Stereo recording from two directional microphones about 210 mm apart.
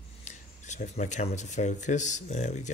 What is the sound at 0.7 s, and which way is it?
Speech, 35° left (ahead or behind).